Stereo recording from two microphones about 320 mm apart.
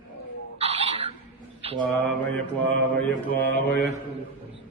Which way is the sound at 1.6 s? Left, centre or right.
Centre.